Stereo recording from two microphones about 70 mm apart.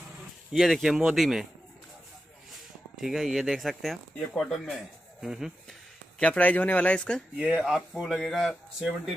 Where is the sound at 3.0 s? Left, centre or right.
Centre.